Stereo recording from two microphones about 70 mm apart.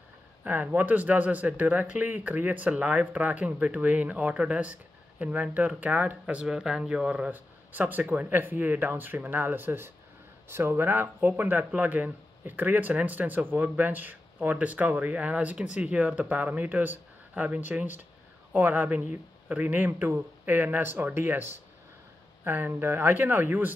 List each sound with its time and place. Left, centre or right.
0.4 s speech: right
19.9 s speech: right